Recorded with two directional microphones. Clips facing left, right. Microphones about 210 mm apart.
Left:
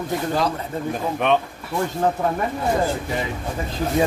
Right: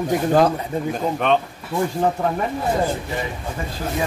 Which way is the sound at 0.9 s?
5° left (ahead or behind).